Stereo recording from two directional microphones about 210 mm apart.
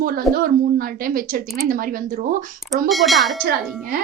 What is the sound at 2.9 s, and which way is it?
Speech, centre (ahead or behind).